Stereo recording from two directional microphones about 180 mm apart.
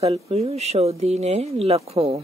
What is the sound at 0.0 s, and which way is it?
Speech, 35° right (ahead or behind).